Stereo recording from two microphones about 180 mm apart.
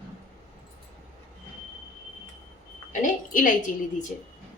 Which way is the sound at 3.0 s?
50° left (ahead or behind).